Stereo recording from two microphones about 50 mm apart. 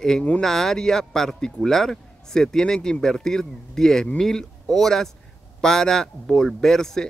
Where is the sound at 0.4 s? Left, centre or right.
Centre.